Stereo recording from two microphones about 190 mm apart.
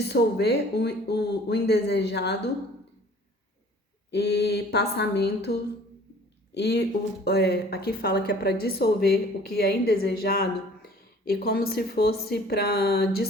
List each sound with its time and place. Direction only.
0.1 s a woman's voice: 60° left (ahead or behind)
4.1 s a woman's voice: 60° left (ahead or behind)